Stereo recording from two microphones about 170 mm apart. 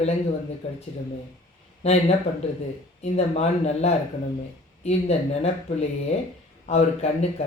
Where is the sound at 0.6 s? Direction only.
40° left (ahead or behind).